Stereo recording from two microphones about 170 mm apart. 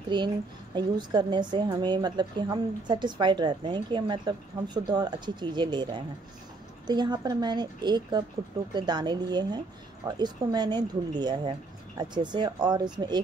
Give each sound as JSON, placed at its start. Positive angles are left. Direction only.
{"t": 0.1, "sound": "a woman's voice", "side_deg": -25}